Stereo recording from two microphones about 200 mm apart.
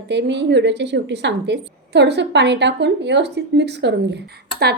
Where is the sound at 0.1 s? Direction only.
60° right (ahead or behind).